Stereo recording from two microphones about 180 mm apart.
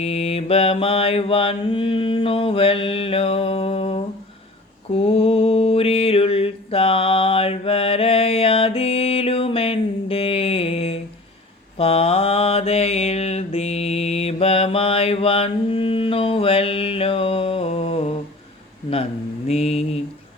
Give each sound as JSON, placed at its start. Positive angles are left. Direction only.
{"t": 0.0, "sound": "mantra", "side_deg": 35}
{"t": 19.5, "sound": "mantra", "side_deg": 35}